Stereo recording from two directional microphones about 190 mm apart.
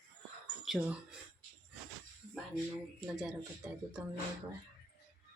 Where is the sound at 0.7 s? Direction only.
Centre (ahead or behind).